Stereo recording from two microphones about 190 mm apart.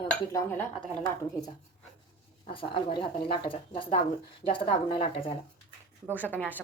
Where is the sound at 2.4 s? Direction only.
25° left (ahead or behind).